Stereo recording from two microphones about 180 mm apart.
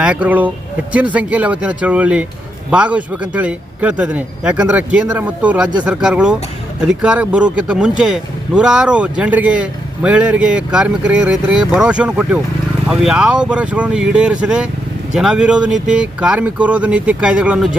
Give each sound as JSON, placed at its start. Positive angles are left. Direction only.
{"t": 0.0, "sound": "a man's voice", "side_deg": -5}